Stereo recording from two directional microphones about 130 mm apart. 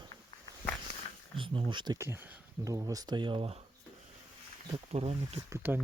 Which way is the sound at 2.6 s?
25° right (ahead or behind).